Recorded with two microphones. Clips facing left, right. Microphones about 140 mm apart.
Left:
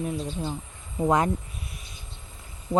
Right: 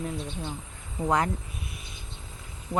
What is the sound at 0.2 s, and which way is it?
Speech, 35° left (ahead or behind).